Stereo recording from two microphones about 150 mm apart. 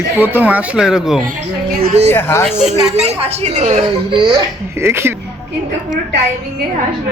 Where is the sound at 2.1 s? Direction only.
15° left (ahead or behind).